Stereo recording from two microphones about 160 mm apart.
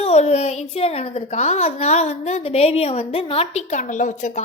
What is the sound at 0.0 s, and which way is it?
A child's voice, 40° left (ahead or behind).